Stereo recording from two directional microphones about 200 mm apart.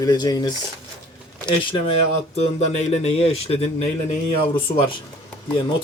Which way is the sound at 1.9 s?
30° left (ahead or behind).